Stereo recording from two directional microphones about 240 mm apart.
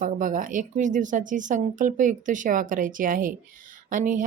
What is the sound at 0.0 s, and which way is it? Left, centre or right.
Speech, right.